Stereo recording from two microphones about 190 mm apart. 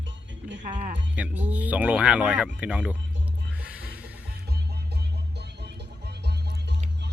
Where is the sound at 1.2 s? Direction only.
10° right (ahead or behind).